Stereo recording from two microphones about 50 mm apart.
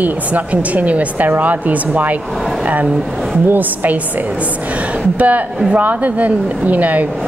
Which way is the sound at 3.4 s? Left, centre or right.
Right.